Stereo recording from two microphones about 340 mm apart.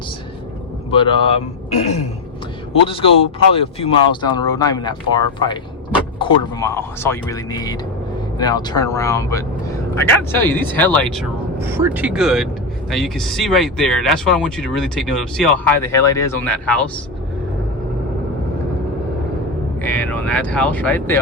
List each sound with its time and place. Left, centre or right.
0.9 s speech: centre
19.8 s speech: centre